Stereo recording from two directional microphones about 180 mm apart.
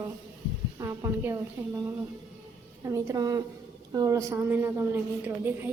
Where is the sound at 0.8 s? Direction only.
15° right (ahead or behind).